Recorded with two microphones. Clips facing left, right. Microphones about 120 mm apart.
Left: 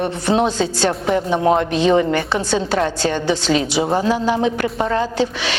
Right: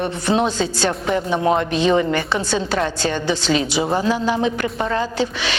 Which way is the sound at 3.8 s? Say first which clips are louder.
Left 2 dB; 25° left (ahead or behind).